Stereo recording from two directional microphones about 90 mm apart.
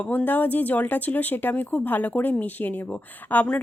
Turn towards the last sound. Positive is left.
turn(degrees=15)  # may be behind; listen again after turning